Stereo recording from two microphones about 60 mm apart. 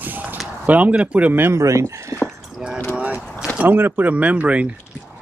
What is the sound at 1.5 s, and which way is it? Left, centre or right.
Speech, right.